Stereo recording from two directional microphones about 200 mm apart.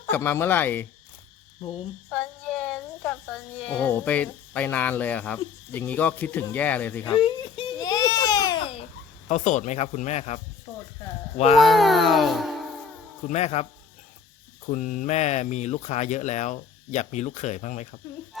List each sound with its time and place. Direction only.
0.1 s speech: 10° left (ahead or behind)
2.0 s speech: 5° left (ahead or behind)
7.1 s baby cry: 25° left (ahead or behind)
9.3 s speech: 35° left (ahead or behind)
11.6 s a child's voice: centre (ahead or behind)
13.2 s speech: 35° left (ahead or behind)
14.7 s speech: 40° left (ahead or behind)